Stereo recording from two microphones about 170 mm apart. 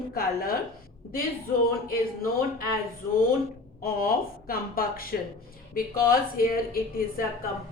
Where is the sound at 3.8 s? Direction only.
60° left (ahead or behind).